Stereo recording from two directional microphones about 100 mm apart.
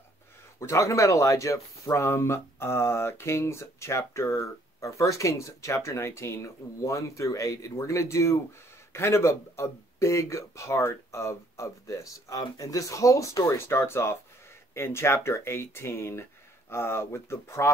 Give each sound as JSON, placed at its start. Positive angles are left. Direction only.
{"t": 0.6, "sound": "speech", "side_deg": 30}